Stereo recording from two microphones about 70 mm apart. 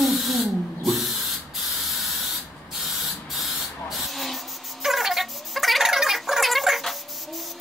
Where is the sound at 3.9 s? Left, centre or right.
Centre.